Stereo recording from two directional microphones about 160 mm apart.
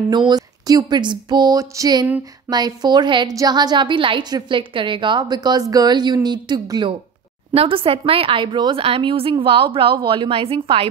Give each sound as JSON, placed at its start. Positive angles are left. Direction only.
{"t": 0.1, "sound": "a woman's voice", "side_deg": -25}